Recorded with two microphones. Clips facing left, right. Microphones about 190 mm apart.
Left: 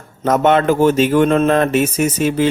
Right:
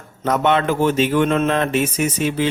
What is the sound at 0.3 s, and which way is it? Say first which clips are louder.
A man's voice: left 4 dB; 45° left (ahead or behind).